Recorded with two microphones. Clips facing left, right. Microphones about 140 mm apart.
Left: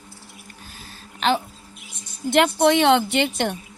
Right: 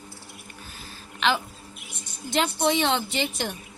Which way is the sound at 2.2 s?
65° left (ahead or behind).